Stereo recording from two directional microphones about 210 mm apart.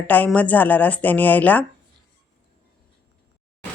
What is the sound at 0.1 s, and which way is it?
Speech, 5° left (ahead or behind).